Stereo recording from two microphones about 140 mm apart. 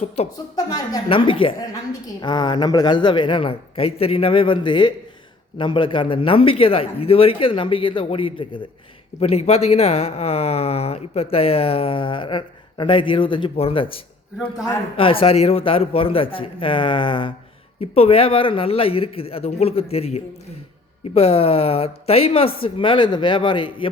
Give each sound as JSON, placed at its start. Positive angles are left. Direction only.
{"t": 1.0, "sound": "a woman's voice", "side_deg": 40}